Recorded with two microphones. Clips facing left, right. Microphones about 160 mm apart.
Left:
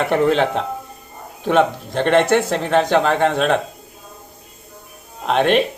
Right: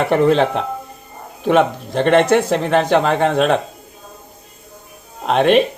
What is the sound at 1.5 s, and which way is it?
Speech, 5° right (ahead or behind).